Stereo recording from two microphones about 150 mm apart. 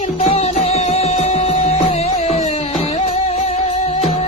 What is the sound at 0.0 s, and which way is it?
Music, 45° left (ahead or behind).